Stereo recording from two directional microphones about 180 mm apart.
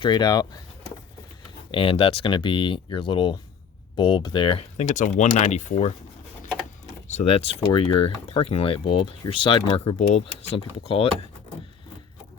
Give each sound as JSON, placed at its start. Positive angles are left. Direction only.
{"t": 0.0, "sound": "speech", "side_deg": 25}
{"t": 1.7, "sound": "speech", "side_deg": 30}
{"t": 4.9, "sound": "speech", "side_deg": 45}
{"t": 7.1, "sound": "speech", "side_deg": 35}